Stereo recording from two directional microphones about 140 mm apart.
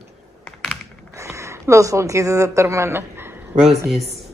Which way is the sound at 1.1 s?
20° right (ahead or behind).